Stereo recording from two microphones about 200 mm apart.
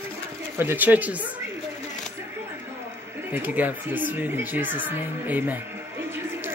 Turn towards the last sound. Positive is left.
turn(degrees=-10)  # may be behind; listen again after turning